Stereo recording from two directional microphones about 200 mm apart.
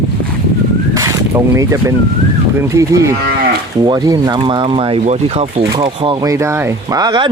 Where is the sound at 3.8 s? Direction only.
20° right (ahead or behind).